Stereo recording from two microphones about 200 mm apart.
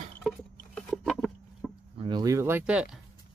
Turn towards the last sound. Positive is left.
turn(degrees=-5)  # may be behind; listen again after turning